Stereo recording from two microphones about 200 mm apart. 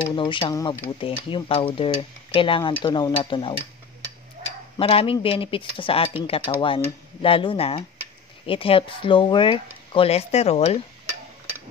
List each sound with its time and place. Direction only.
0.1 s speech: 25° left (ahead or behind)
4.7 s speech: 25° left (ahead or behind)